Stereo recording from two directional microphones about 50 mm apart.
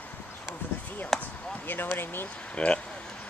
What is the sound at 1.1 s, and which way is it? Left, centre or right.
Basketball bounce, centre.